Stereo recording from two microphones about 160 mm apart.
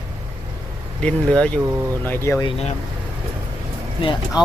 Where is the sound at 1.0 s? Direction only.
5° left (ahead or behind).